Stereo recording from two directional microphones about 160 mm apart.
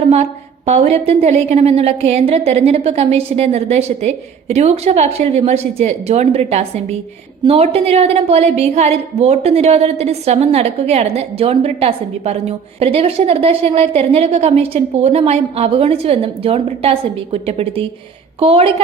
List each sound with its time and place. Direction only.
0.1 s a woman's voice: 40° right (ahead or behind)